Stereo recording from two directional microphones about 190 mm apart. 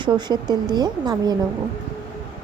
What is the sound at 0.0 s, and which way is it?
A woman's voice, 20° right (ahead or behind).